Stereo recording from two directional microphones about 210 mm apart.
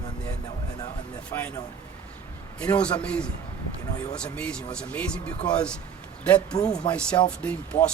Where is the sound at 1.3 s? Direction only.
5° left (ahead or behind).